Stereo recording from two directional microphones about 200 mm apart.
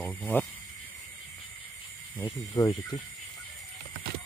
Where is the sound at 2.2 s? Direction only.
15° left (ahead or behind).